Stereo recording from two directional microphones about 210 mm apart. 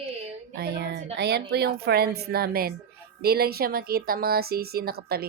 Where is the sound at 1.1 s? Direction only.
50° right (ahead or behind).